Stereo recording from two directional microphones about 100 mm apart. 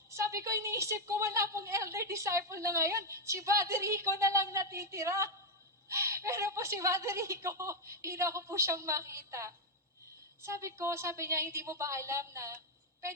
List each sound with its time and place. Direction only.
0.1 s a woman's voice: 30° right (ahead or behind)